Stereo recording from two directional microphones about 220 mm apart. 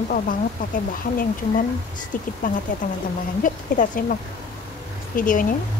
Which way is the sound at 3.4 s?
40° left (ahead or behind).